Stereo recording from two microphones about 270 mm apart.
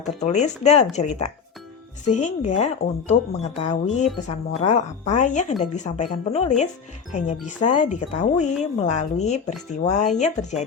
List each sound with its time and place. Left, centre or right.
0.0 s speech: left